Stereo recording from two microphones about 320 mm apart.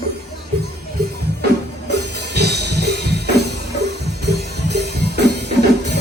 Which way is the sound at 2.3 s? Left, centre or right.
Right.